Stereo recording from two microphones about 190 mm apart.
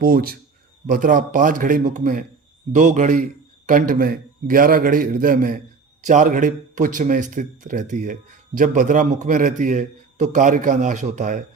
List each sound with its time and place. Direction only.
0.0 s a man's voice: 50° right (ahead or behind)